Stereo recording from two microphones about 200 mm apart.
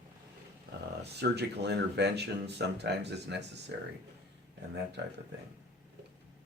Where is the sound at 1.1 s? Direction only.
55° right (ahead or behind).